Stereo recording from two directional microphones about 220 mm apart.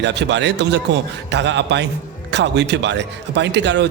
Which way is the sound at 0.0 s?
50° right (ahead or behind).